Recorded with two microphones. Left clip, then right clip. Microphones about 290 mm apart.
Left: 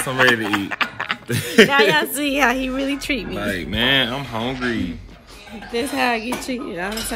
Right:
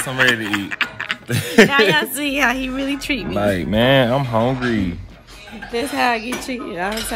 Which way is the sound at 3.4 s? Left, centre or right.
Right.